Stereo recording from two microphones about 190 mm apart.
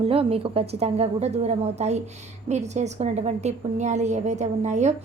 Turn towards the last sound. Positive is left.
turn(degrees=-40)  # may be behind; listen again after turning